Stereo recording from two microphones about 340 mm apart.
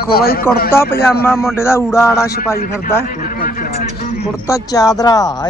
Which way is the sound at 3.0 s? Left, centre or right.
Left.